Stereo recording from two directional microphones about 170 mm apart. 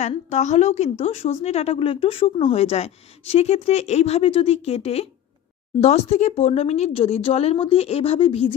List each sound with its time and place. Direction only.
0.0 s a woman's voice: 40° left (ahead or behind)